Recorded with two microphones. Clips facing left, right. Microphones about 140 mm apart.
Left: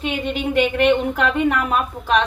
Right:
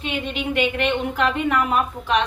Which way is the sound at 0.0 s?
40° left (ahead or behind).